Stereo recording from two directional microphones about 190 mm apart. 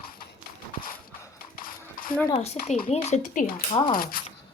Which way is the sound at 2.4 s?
35° left (ahead or behind).